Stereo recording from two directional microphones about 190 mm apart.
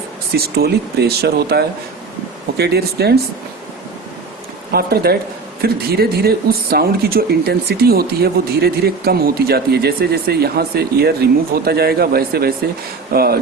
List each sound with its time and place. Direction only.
0.3 s speech: 55° right (ahead or behind)
4.7 s speech: 55° right (ahead or behind)